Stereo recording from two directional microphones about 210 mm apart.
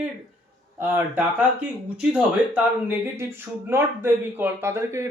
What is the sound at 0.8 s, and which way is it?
Speech, 10° right (ahead or behind).